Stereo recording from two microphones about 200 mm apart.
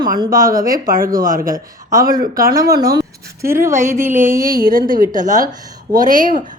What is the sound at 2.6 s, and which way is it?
A woman's voice, 15° right (ahead or behind).